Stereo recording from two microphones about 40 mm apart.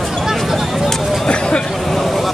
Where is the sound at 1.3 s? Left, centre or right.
Left.